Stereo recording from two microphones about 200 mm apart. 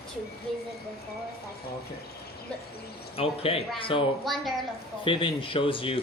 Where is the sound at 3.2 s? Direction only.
30° left (ahead or behind).